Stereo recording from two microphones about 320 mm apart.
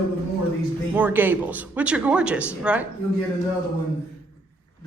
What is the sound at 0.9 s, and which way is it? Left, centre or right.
A man's voice, centre.